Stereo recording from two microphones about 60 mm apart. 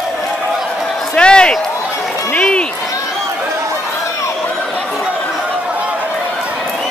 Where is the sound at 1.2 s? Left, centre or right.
Centre.